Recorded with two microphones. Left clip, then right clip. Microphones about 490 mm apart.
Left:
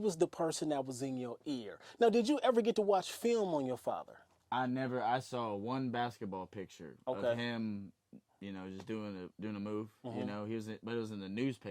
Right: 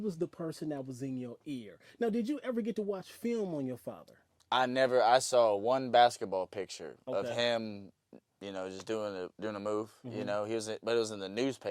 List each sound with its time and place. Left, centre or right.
0.0 s speech: left
4.4 s speech: right